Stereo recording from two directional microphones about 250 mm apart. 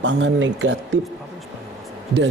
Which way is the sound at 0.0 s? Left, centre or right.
Right.